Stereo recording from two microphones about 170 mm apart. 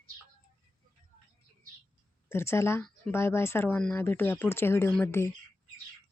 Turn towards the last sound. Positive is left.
turn(degrees=15)  # may be behind; listen again after turning